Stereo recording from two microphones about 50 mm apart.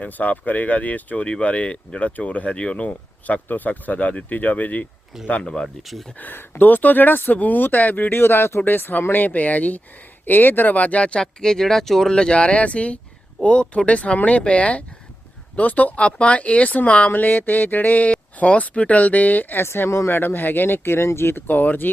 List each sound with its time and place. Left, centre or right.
0.0 s speech: left
5.4 s speech: centre
5.8 s speech: centre
6.1 s speech: left
8.1 s speech: left
8.6 s speech: left
10.8 s speech: left; by 12.1 s centre
12.1 s speech: centre; by 19.6 s left
19.6 s speech: left
20.1 s speech: left